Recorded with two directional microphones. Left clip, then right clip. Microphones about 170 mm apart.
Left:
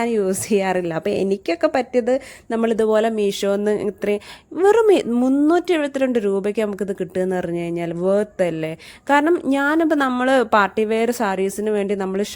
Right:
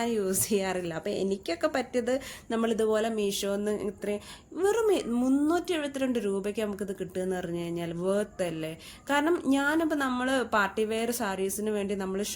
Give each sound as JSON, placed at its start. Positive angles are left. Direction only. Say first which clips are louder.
{"t": 0.0, "sound": "a woman's voice", "louder": "left 9 dB", "side_deg": 45}